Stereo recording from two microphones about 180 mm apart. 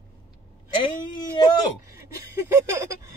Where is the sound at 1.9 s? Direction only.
15° right (ahead or behind).